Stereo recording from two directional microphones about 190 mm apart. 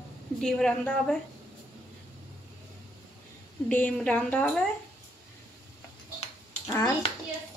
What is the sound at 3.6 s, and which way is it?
A woman's voice, 5° left (ahead or behind).